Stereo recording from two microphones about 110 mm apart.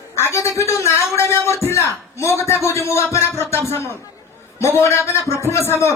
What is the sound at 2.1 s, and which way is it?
A man's voice, 25° left (ahead or behind).